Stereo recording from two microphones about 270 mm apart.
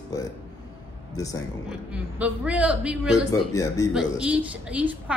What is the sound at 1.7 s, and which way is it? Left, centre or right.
A woman's voice, centre.